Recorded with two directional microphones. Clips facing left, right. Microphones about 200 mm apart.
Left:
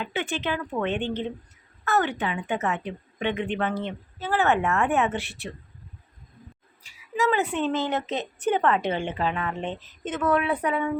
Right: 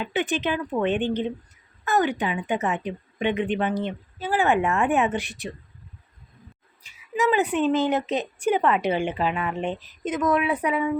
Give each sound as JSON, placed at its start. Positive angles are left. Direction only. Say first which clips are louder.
{"t": 0.0, "sound": "speech", "louder": "right 4 dB", "side_deg": -15}
{"t": 6.8, "sound": "speech", "louder": "right 2 dB", "side_deg": -15}